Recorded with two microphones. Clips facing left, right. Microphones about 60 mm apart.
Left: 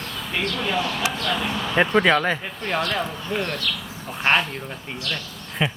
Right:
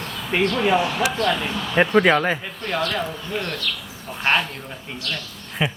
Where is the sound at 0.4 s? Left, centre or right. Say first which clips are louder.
Right 7 dB; right.